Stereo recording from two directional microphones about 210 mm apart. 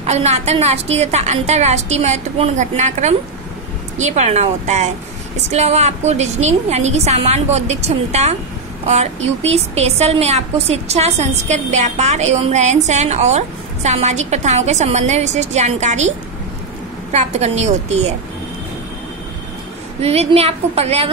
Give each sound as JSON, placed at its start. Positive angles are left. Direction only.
{"t": 0.0, "sound": "a woman's voice", "side_deg": -30}
{"t": 20.0, "sound": "a woman's voice", "side_deg": -30}